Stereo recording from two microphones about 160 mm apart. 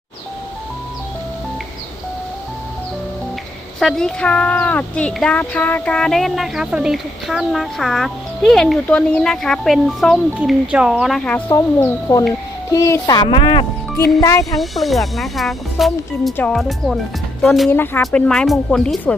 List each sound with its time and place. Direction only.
3.8 s speech: centre (ahead or behind)
11.5 s speech: 20° left (ahead or behind)
14.2 s speech: 20° left (ahead or behind)
14.5 s speech: centre (ahead or behind)
17.7 s speech: 15° left (ahead or behind)